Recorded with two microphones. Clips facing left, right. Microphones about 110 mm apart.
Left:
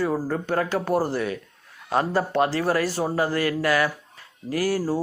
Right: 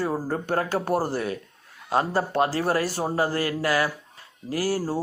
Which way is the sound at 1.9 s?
25° right (ahead or behind).